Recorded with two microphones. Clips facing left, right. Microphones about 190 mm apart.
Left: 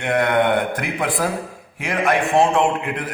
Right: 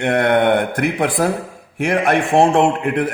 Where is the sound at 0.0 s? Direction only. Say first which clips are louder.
Right 3 dB; 55° right (ahead or behind).